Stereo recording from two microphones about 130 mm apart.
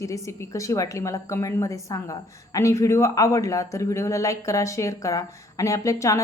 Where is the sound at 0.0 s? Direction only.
25° left (ahead or behind).